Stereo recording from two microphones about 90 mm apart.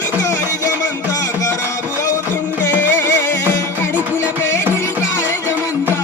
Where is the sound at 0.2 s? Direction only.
35° left (ahead or behind).